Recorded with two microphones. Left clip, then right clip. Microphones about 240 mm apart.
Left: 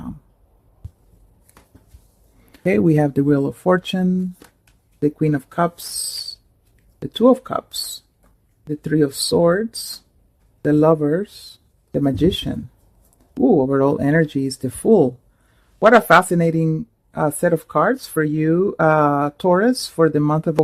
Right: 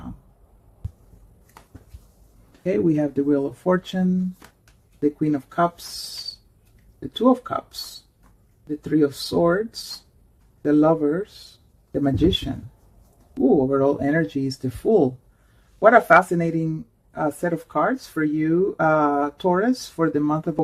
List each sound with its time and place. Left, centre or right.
2.5 s speech: left
7.1 s speech: left
8.8 s speech: left
13.6 s speech: left